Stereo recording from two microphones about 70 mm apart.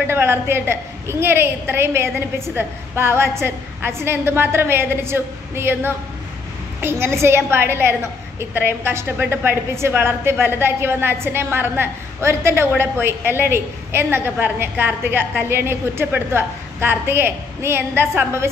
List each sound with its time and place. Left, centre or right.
0.0 s a woman's voice: right